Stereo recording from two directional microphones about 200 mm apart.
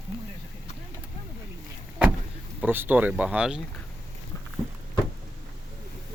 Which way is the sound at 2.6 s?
10° right (ahead or behind).